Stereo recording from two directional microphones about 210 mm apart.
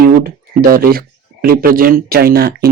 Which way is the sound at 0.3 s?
45° right (ahead or behind).